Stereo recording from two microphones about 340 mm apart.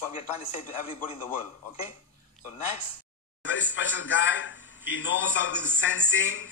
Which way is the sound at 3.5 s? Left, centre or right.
Left.